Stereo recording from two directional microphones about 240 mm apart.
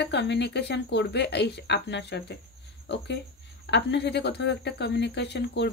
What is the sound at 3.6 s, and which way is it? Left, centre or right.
Speech, left.